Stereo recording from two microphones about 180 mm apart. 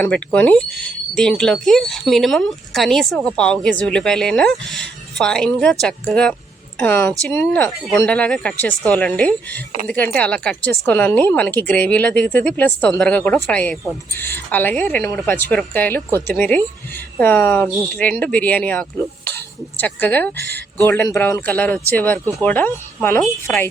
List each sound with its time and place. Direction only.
0.0 s speech: 10° left (ahead or behind)
20.3 s speech: 65° right (ahead or behind)
20.8 s speech: 15° left (ahead or behind)